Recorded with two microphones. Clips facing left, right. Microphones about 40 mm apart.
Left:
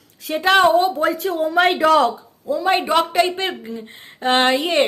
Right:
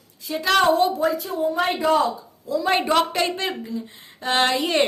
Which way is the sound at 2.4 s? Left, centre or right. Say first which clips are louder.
Left 3 dB; left.